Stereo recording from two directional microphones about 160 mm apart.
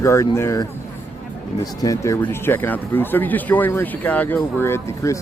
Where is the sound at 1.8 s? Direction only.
20° left (ahead or behind).